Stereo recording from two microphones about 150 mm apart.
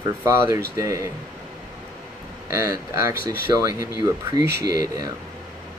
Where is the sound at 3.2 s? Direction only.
90° right.